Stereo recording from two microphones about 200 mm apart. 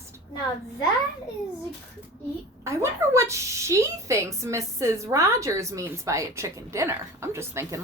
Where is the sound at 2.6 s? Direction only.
15° right (ahead or behind).